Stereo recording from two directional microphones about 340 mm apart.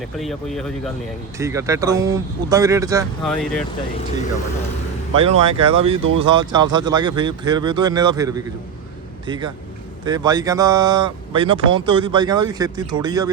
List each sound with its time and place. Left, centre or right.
0.2 s speech: centre
3.2 s speech: centre
5.1 s speech: centre
6.0 s speech: right
6.2 s speech: centre